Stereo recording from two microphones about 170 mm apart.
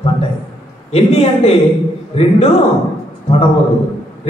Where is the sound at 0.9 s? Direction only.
35° left (ahead or behind).